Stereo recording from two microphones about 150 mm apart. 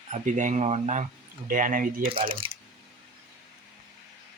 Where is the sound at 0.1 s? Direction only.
55° right (ahead or behind).